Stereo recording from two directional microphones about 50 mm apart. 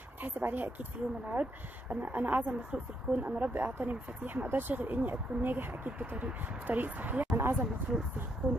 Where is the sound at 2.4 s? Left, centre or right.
Right.